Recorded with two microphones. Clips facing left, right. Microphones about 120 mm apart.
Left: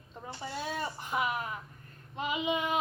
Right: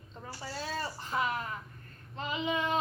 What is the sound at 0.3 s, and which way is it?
Speech, 20° left (ahead or behind).